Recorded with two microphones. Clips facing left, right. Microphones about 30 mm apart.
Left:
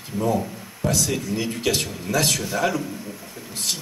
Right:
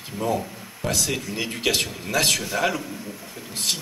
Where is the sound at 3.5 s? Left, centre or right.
Right.